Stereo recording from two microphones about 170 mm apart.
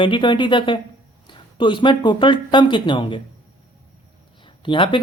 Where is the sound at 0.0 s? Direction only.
30° left (ahead or behind).